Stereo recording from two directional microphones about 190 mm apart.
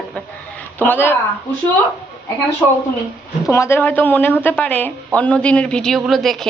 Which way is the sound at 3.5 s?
15° left (ahead or behind).